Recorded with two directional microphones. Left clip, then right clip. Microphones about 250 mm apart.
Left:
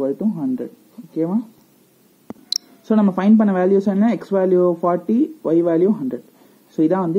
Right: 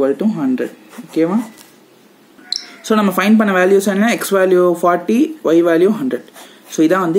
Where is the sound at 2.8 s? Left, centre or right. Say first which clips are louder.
Right 5 dB; centre.